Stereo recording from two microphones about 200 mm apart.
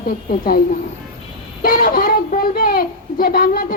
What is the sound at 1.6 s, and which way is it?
Speech, 45° left (ahead or behind).